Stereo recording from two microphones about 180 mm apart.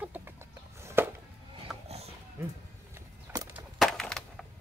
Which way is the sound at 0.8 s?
10° right (ahead or behind).